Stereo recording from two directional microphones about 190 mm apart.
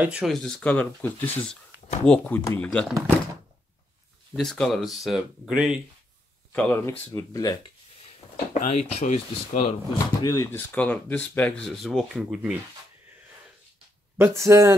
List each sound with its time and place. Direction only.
0.0 s speech: 5° right (ahead or behind)
4.4 s speech: centre (ahead or behind)
6.5 s speech: 5° left (ahead or behind)
8.6 s speech: 35° left (ahead or behind)
9.9 s speech: 20° left (ahead or behind); by 12.5 s centre (ahead or behind)
14.1 s speech: 15° right (ahead or behind)